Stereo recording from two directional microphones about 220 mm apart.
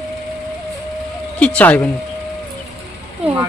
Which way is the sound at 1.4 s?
5° left (ahead or behind).